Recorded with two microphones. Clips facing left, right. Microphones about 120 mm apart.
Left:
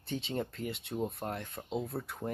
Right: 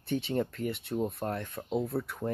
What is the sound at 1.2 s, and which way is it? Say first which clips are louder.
Speech: right 4 dB; 20° left (ahead or behind).